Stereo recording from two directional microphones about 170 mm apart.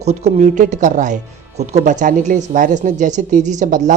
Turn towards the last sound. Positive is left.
turn(degrees=-50)  # may be behind; listen again after turning